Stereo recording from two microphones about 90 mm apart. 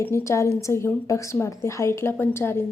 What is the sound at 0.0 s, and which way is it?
A woman's voice, 30° left (ahead or behind).